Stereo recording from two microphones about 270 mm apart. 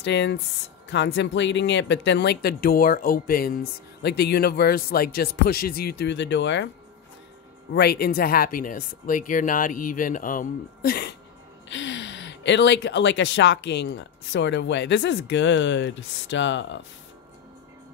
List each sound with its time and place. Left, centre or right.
0.0 s speech: left
7.7 s speech: left